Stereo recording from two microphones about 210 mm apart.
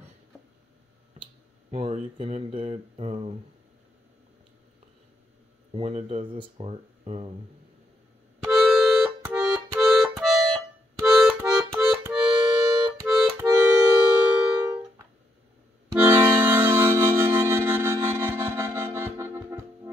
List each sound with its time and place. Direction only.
1.7 s speech: 30° right (ahead or behind)
5.7 s speech: 30° right (ahead or behind)
8.5 s music: centre (ahead or behind)
11.1 s accordion: centre (ahead or behind)
15.9 s accordion: 10° right (ahead or behind)